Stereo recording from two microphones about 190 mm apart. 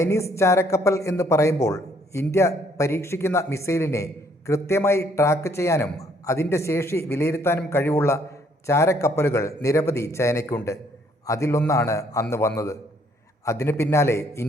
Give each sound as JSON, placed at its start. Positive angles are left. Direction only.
{"t": 0.0, "sound": "speech", "side_deg": 15}